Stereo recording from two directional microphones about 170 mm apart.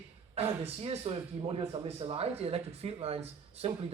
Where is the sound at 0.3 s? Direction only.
35° right (ahead or behind).